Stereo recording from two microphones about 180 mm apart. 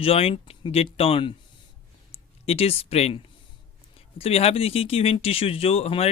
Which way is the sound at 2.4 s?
35° left (ahead or behind).